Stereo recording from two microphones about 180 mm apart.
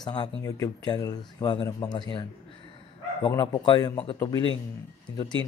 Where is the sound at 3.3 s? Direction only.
20° left (ahead or behind).